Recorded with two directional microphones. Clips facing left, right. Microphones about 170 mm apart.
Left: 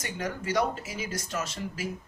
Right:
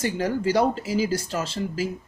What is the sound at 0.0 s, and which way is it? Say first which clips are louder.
Speech: right 10 dB; 30° right (ahead or behind).